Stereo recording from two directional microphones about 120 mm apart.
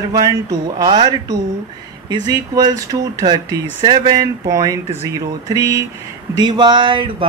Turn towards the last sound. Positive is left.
turn(degrees=-40)  # may be behind; listen again after turning